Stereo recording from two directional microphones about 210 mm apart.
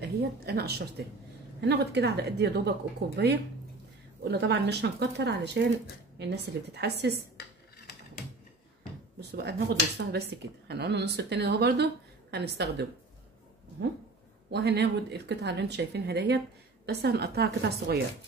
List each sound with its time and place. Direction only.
0.0 s speech: 50° right (ahead or behind)
7.3 s a sound: 50° left (ahead or behind)
9.3 s speech: 50° right (ahead or behind)
14.5 s speech: 50° right (ahead or behind)